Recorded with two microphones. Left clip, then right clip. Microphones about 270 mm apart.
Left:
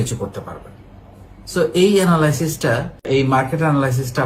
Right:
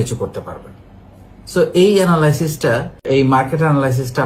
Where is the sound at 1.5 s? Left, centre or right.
Centre.